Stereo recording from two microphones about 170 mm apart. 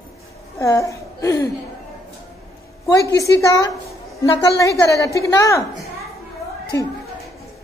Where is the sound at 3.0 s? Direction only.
20° left (ahead or behind).